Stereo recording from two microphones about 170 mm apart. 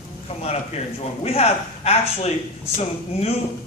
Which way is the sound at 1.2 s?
35° left (ahead or behind).